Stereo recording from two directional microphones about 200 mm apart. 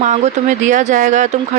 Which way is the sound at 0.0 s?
35° right (ahead or behind).